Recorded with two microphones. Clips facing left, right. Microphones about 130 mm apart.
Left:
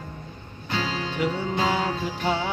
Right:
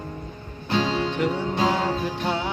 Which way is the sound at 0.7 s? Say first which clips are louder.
Right 5 dB; centre (ahead or behind).